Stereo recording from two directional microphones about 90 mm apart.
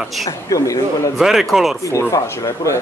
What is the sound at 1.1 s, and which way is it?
Speech, centre (ahead or behind).